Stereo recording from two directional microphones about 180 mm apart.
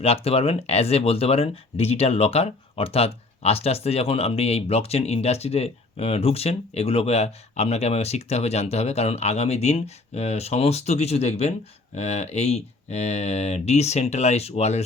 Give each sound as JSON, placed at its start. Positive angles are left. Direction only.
{"t": 0.0, "sound": "speech", "side_deg": 35}